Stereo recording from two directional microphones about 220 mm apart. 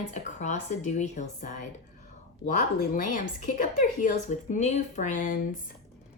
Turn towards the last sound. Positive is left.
turn(degrees=35)  # may be behind; listen again after turning